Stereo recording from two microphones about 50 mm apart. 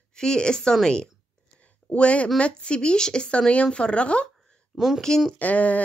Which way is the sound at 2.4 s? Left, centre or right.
Left.